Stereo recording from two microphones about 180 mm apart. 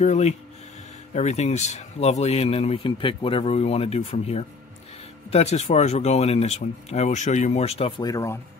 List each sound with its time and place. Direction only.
0.0 s speech: 40° left (ahead or behind); by 8.4 s 20° left (ahead or behind)